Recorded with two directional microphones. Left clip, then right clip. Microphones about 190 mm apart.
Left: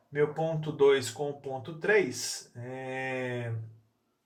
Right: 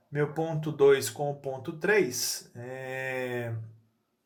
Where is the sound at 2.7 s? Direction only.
40° right (ahead or behind).